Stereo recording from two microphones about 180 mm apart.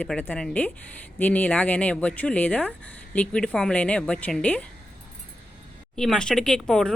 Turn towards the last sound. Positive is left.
turn(degrees=5)  # may be behind; listen again after turning